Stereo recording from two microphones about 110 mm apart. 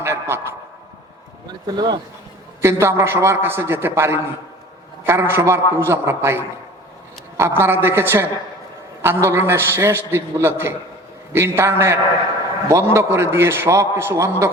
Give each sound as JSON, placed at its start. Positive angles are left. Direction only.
{"t": 0.0, "sound": "a man's voice", "side_deg": -25}
{"t": 1.6, "sound": "speech", "side_deg": -40}
{"t": 2.6, "sound": "a man's voice", "side_deg": -25}